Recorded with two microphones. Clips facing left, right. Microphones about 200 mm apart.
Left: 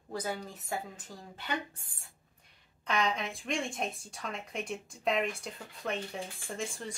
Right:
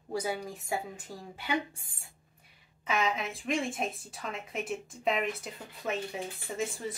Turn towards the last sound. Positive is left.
turn(degrees=-5)  # may be behind; listen again after turning